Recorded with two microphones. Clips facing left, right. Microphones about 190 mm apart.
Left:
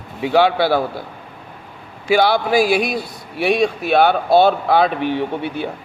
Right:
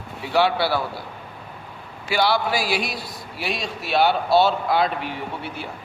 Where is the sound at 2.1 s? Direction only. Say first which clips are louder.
Left 6 dB; 50° left (ahead or behind).